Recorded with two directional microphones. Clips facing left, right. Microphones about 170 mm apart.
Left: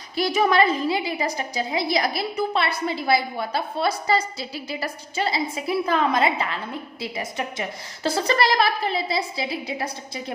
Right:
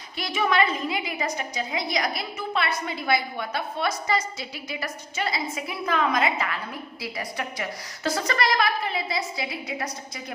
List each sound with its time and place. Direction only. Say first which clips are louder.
0.2 s a woman's voice: left 4 dB; 40° left (ahead or behind)